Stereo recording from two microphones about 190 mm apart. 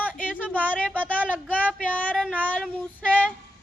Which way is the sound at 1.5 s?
10° left (ahead or behind).